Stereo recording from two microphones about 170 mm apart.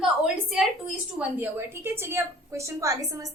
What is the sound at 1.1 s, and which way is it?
A woman's voice, 10° right (ahead or behind).